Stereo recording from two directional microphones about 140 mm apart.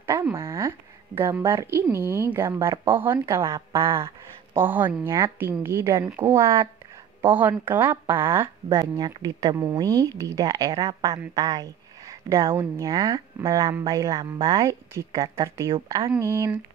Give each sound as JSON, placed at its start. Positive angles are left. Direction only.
{"t": 0.0, "sound": "a woman's voice", "side_deg": -20}